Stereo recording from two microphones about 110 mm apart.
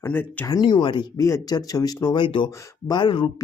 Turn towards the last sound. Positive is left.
turn(degrees=45)  # may be behind; listen again after turning